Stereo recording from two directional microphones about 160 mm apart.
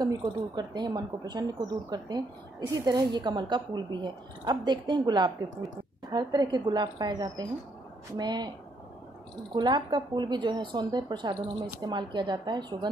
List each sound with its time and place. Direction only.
0.0 s speech: 25° right (ahead or behind)
9.6 s speech: 25° right (ahead or behind)